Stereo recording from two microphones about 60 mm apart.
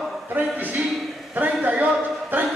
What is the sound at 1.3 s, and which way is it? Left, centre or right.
Speech, right.